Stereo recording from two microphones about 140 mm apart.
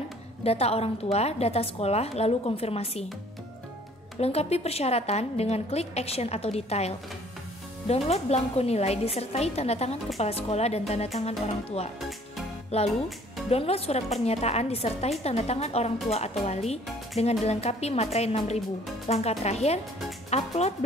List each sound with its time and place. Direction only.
0.4 s a woman's voice: 45° left (ahead or behind)
4.2 s a woman's voice: 50° left (ahead or behind)